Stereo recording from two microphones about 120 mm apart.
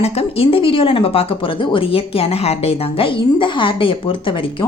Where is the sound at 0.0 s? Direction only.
55° left (ahead or behind).